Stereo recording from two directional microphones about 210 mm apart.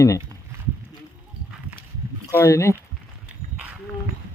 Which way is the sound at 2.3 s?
15° left (ahead or behind).